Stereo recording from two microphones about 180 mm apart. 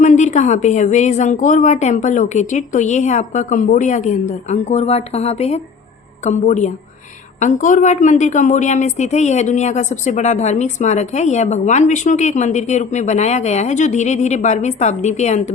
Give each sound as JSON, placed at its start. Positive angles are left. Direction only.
{"t": 0.0, "sound": "a woman's voice", "side_deg": 40}